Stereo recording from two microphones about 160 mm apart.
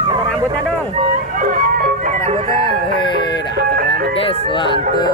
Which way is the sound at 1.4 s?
60° right (ahead or behind).